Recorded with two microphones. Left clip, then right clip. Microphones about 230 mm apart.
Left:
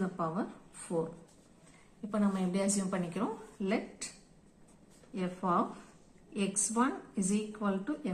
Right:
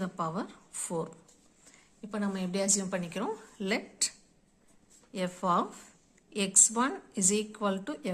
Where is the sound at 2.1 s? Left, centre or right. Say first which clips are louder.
Even; right.